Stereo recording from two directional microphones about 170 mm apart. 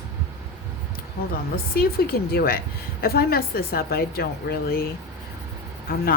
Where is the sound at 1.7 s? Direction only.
65° left (ahead or behind).